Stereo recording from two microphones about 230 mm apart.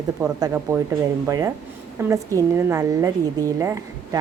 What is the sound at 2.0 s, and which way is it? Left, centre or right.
A woman's voice, centre.